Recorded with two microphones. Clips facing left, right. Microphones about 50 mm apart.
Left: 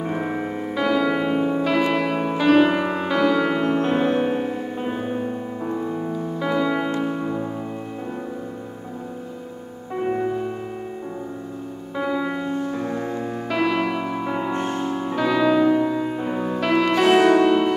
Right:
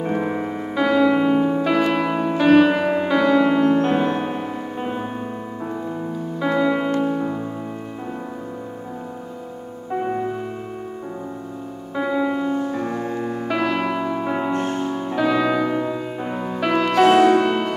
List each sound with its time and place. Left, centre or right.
0.0 s music: centre
6.4 s music: centre
12.0 s music: centre
14.5 s music: centre
14.9 s music: centre